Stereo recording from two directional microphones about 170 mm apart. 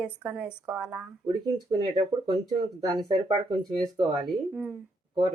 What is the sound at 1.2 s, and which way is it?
Speech, 25° right (ahead or behind).